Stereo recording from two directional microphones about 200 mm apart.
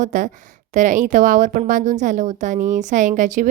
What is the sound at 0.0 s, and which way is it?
Speech, 40° right (ahead or behind).